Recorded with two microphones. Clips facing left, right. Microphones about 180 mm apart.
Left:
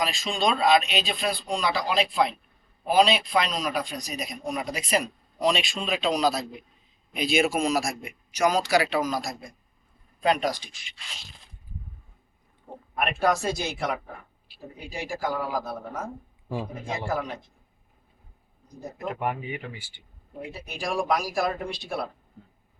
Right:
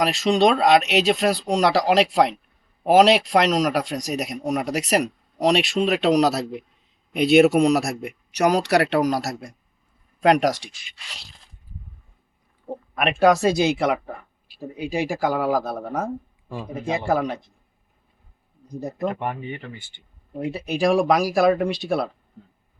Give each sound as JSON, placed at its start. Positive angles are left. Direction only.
{"t": 0.0, "sound": "a man's voice", "side_deg": -70}
{"t": 12.9, "sound": "a man's voice", "side_deg": -90}
{"t": 17.1, "sound": "a man's voice", "side_deg": -75}
{"t": 18.8, "sound": "a man's voice", "side_deg": -70}
{"t": 19.0, "sound": "speech", "side_deg": 5}
{"t": 20.5, "sound": "a man's voice", "side_deg": -70}